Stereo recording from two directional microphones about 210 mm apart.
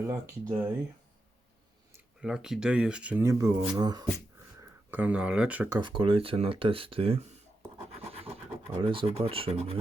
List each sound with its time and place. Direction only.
0.1 s speech: 10° right (ahead or behind)
2.2 s speech: 5° right (ahead or behind); by 4.0 s 20° right (ahead or behind)
4.9 s speech: 10° right (ahead or behind); by 7.3 s 25° right (ahead or behind)
7.9 s scratch: 30° right (ahead or behind)
8.8 s speech: 25° right (ahead or behind)